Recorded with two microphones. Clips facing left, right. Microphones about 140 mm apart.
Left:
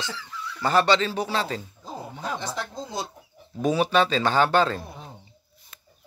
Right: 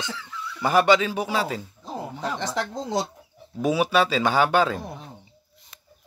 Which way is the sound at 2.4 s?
90° right.